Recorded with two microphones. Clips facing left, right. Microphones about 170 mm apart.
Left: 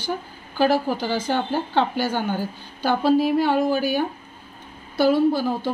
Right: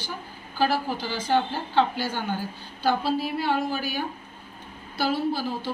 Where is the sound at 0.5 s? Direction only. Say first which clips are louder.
Left 5 dB; 55° left (ahead or behind).